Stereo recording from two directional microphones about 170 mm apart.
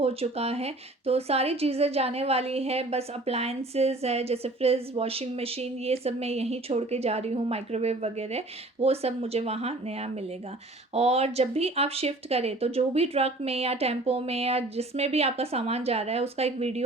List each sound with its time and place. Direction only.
0.0 s speech: 35° right (ahead or behind)